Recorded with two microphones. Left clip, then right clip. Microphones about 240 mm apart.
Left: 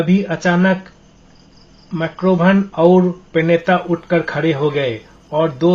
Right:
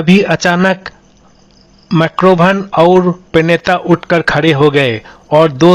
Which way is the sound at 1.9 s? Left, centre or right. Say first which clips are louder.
Right 8 dB; right.